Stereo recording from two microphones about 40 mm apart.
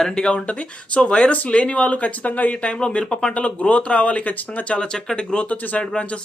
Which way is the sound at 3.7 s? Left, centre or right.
Left.